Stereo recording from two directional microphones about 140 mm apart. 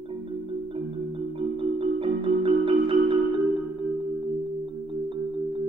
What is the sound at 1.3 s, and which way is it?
Music, 40° right (ahead or behind).